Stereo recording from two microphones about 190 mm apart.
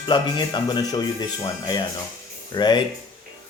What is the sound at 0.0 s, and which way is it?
Speech, 25° left (ahead or behind).